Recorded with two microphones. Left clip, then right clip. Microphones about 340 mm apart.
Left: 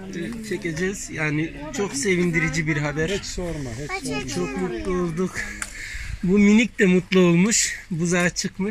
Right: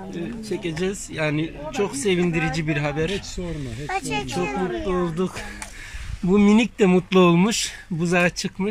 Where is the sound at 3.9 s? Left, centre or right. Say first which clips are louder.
Right 3 dB; right.